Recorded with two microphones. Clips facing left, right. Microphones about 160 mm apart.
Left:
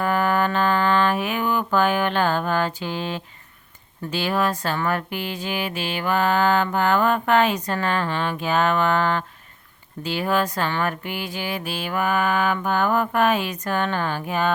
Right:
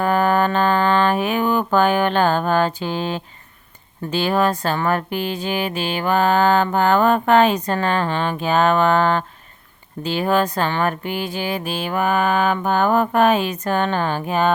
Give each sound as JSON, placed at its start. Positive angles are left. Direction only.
{"t": 0.0, "sound": "mantra", "side_deg": -35}
{"t": 4.1, "sound": "music", "side_deg": -30}
{"t": 10.0, "sound": "speech", "side_deg": -30}